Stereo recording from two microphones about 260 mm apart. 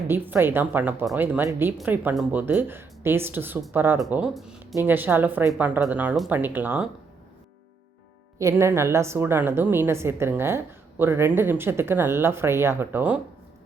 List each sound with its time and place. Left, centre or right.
0.1 s speech: centre
8.4 s speech: centre